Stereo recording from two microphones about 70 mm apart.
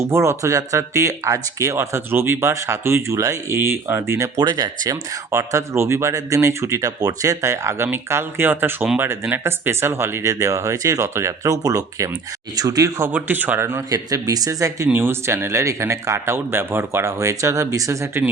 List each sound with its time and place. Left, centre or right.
0.0 s speech: right
4.4 s speech: right
5.3 s speech: right
7.0 s speech: right
7.9 s speech: right
13.1 s speech: right
13.9 s speech: right
14.9 s speech: right